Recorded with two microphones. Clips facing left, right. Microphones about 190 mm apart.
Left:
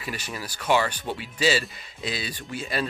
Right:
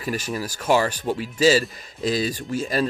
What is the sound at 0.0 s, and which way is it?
Speech, 45° right (ahead or behind).